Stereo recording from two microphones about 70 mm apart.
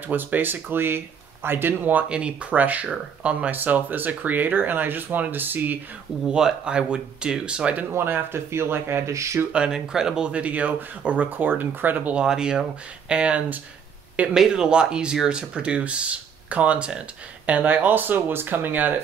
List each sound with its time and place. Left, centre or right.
0.1 s speech: right
6.3 s speech: centre
7.9 s speech: right
9.5 s speech: centre
12.2 s speech: centre; by 18.9 s right